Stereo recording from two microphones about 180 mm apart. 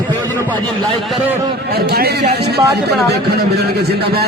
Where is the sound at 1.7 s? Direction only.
60° right (ahead or behind).